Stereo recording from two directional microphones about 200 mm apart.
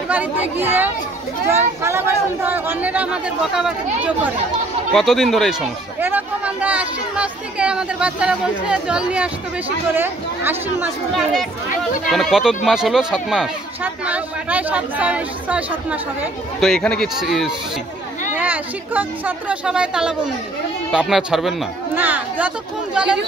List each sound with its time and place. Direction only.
0.1 s speech: 10° right (ahead or behind)